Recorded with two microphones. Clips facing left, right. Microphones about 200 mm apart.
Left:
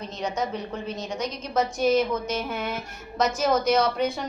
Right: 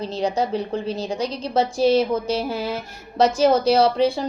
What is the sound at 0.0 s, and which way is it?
A woman's voice, 30° right (ahead or behind).